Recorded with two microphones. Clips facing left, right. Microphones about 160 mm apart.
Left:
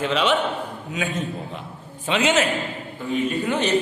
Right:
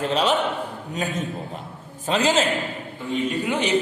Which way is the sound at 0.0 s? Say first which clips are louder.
Even; 40° right (ahead or behind).